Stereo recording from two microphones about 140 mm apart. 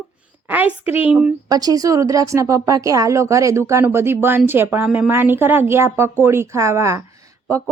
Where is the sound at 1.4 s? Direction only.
25° right (ahead or behind).